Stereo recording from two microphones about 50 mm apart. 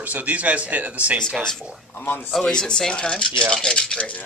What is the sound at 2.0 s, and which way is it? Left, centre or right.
Speech, left.